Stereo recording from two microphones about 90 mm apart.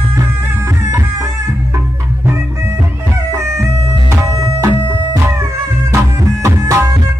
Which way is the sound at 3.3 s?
35° right (ahead or behind).